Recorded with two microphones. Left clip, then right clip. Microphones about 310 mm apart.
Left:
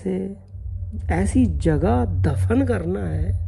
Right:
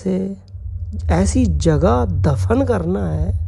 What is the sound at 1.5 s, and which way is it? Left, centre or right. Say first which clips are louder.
Speech: right 5 dB; centre.